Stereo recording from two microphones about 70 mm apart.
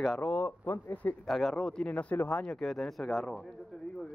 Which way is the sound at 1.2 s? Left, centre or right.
Centre.